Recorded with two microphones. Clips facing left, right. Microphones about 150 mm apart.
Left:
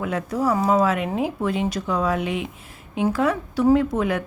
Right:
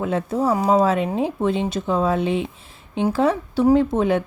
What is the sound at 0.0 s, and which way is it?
A woman's voice, 25° right (ahead or behind).